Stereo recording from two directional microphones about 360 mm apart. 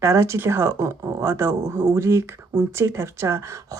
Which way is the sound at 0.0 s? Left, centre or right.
Centre.